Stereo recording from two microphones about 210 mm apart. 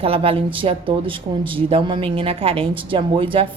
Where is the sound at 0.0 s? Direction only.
25° right (ahead or behind).